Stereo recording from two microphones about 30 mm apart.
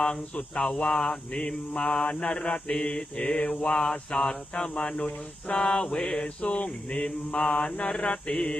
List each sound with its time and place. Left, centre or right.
0.5 s mantra: left
4.8 s speech: left
5.5 s mantra: left
6.2 s mantra: left